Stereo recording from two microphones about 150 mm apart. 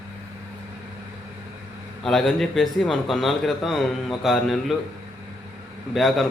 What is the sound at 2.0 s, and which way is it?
A man's voice, centre (ahead or behind).